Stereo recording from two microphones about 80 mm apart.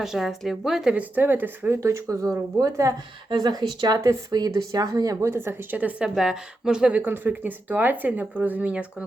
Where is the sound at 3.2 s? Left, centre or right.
Right.